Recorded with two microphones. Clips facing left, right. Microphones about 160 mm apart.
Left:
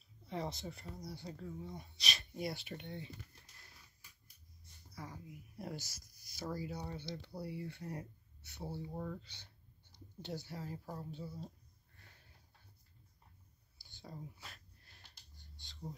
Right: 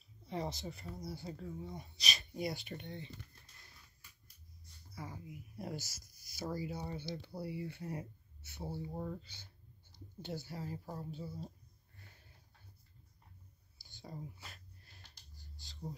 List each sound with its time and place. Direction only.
0.3 s speech: centre (ahead or behind)
4.9 s speech: 5° right (ahead or behind)
8.9 s speech: 15° right (ahead or behind)
9.2 s speech: 5° right (ahead or behind)
14.1 s speech: centre (ahead or behind)
15.6 s a sound: 5° right (ahead or behind)